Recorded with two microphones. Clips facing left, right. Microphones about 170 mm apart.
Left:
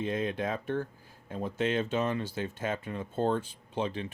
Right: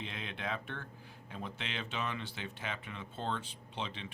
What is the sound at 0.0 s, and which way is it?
Speech, 45° left (ahead or behind).